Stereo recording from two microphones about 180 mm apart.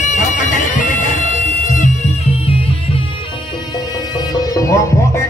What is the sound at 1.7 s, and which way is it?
Music, 45° left (ahead or behind).